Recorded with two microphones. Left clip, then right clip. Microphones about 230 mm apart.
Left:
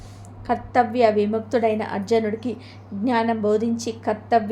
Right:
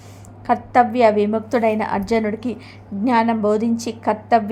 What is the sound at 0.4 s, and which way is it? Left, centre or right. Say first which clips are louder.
A woman's voice: right 5 dB; right.